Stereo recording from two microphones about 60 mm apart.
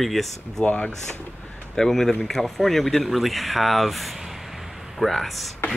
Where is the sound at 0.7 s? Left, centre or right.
Centre.